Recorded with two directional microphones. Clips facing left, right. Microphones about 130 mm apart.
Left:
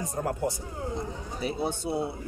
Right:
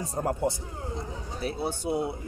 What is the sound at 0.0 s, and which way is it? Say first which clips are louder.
Speech: right 1 dB; 30° right (ahead or behind).